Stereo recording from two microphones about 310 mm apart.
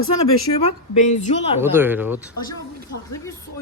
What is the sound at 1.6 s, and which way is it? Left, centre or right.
Speech, centre.